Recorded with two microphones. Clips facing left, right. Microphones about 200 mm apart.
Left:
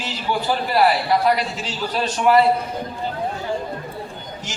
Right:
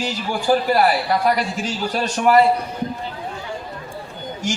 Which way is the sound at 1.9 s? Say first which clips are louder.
Even; 45° right (ahead or behind).